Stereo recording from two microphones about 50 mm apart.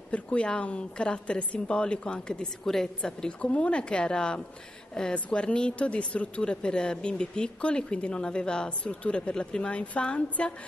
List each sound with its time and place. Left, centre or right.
0.1 s speech: left